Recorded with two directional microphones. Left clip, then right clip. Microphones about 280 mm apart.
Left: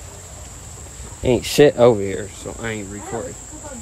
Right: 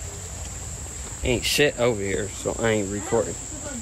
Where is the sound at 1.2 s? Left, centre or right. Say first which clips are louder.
Left 7 dB; left.